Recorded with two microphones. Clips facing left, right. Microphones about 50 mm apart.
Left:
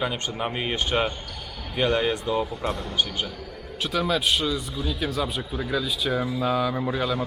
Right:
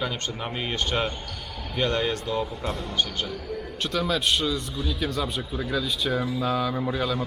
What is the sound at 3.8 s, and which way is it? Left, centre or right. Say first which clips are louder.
A man's voice: left 2 dB; centre.